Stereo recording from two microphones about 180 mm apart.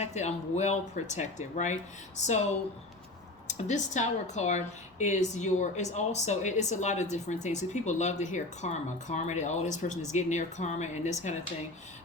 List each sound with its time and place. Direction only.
0.0 s a woman's voice: 40° left (ahead or behind)
3.4 s a woman's voice: 40° left (ahead or behind)